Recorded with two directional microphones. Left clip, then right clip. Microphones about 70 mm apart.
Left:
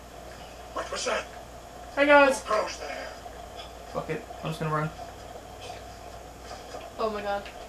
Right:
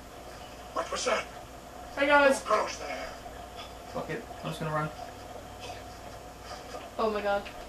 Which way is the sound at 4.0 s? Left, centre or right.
Left.